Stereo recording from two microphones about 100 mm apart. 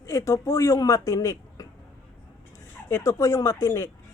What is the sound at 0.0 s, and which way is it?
Speech, 35° left (ahead or behind).